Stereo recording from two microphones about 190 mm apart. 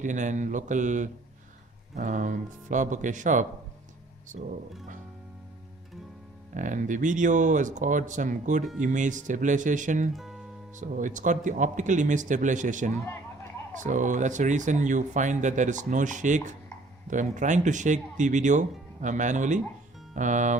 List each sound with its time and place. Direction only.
0.0 s speech: 40° right (ahead or behind)
6.5 s speech: 40° right (ahead or behind)
10.1 s music: centre (ahead or behind)
10.8 s speech: 40° right (ahead or behind)